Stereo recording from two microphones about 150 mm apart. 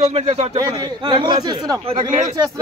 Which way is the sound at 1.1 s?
35° right (ahead or behind).